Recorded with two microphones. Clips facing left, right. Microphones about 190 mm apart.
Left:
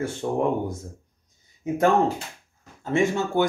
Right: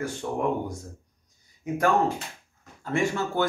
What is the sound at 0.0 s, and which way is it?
Speech, 25° left (ahead or behind).